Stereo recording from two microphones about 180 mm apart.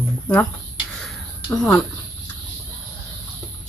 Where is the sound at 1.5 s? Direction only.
15° left (ahead or behind).